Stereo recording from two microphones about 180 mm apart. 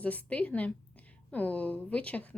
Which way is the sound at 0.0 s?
10° left (ahead or behind).